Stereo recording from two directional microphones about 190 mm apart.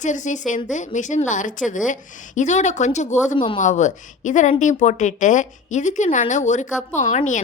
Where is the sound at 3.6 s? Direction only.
40° left (ahead or behind).